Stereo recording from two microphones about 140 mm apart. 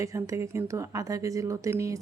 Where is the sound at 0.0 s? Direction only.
20° right (ahead or behind).